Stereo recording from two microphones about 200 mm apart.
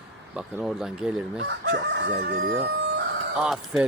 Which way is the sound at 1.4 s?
55° right (ahead or behind).